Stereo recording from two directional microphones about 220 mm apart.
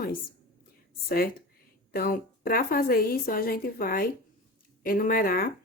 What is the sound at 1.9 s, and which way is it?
A woman's voice, 40° left (ahead or behind).